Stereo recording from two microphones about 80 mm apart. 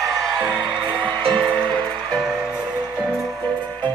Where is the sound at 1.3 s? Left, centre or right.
Centre.